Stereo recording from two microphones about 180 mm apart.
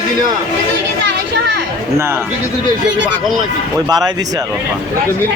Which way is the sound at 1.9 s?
15° right (ahead or behind).